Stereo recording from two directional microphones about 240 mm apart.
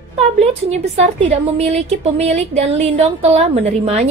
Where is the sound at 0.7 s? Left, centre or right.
Right.